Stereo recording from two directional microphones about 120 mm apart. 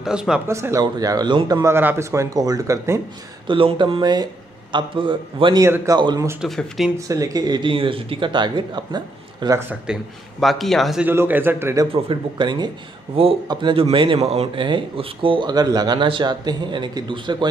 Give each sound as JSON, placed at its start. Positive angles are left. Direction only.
{"t": 0.0, "sound": "speech", "side_deg": -5}
{"t": 0.5, "sound": "speech", "side_deg": -25}
{"t": 1.6, "sound": "speech", "side_deg": -20}
{"t": 3.4, "sound": "speech", "side_deg": -45}
{"t": 5.6, "sound": "speech", "side_deg": -30}
{"t": 6.4, "sound": "speech", "side_deg": -5}
{"t": 7.1, "sound": "speech", "side_deg": -30}
{"t": 9.6, "sound": "a man's voice", "side_deg": -15}
{"t": 10.4, "sound": "speech", "side_deg": 0}
{"t": 11.1, "sound": "a man's voice", "side_deg": -15}
{"t": 11.9, "sound": "speech", "side_deg": -45}
{"t": 13.2, "sound": "speech", "side_deg": -50}